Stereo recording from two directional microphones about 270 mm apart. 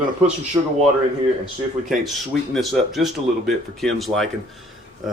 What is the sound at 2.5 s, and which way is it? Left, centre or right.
Speech, centre.